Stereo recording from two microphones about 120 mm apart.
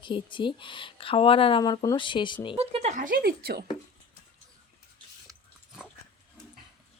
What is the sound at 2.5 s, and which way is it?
Speech, 55° right (ahead or behind).